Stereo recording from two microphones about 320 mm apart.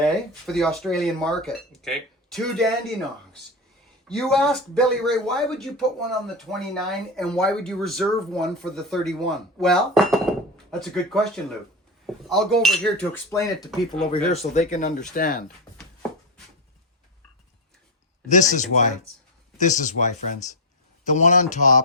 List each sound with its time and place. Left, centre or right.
0.0 s speech: centre
4.1 s speech: centre
14.5 s speech: left
18.3 s speech: left